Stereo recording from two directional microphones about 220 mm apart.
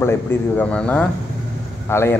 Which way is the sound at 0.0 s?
10° left (ahead or behind).